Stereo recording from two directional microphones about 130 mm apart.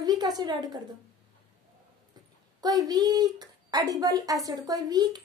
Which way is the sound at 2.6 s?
30° right (ahead or behind).